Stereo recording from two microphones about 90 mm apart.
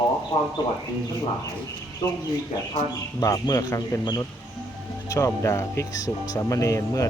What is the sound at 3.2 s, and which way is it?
Speech, 40° left (ahead or behind).